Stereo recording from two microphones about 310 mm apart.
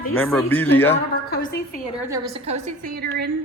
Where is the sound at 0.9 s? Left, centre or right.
Left.